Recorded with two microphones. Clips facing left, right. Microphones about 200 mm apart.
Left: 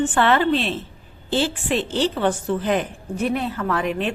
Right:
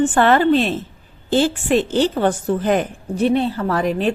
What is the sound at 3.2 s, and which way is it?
Speech, 30° right (ahead or behind).